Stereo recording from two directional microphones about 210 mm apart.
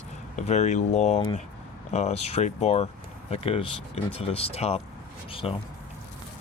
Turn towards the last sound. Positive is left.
turn(degrees=25)  # may be behind; listen again after turning